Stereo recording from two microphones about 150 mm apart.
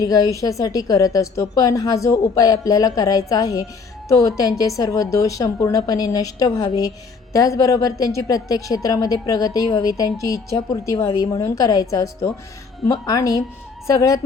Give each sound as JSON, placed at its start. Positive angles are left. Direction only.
{"t": 0.0, "sound": "a woman's voice", "side_deg": 25}